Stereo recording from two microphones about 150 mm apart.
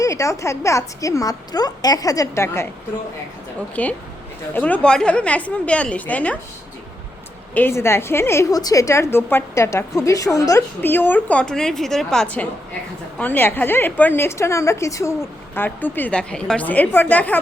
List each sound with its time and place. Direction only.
0.0 s a woman's voice: 20° left (ahead or behind)
3.8 s a woman's voice: 10° left (ahead or behind)
7.5 s a woman's voice: 15° left (ahead or behind)